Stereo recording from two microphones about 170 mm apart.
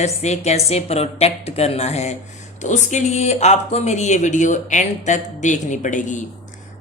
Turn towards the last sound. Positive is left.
turn(degrees=45)  # may be behind; listen again after turning